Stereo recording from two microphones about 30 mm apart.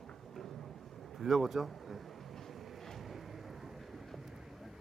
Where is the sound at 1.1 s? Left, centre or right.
Centre.